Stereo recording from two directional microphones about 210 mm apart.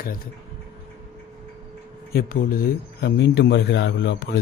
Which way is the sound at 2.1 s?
45° left (ahead or behind).